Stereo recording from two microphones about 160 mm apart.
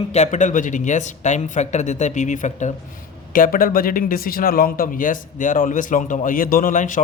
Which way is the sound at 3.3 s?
60° left (ahead or behind).